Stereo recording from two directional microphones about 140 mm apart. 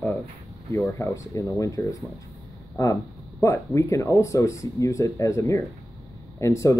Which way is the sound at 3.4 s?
20° left (ahead or behind).